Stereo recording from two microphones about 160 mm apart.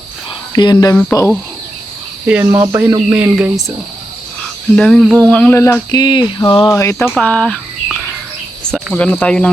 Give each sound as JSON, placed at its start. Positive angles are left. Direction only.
{"t": 0.5, "sound": "speech", "side_deg": 25}
{"t": 2.2, "sound": "speech", "side_deg": -10}
{"t": 4.8, "sound": "speech", "side_deg": 0}
{"t": 5.3, "sound": "speech", "side_deg": 10}
{"t": 5.9, "sound": "speech", "side_deg": 30}
{"t": 6.7, "sound": "speech", "side_deg": 20}
{"t": 7.1, "sound": "speech", "side_deg": 5}